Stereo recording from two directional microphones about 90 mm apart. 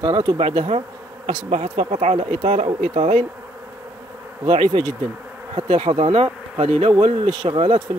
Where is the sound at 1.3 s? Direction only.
65° right (ahead or behind).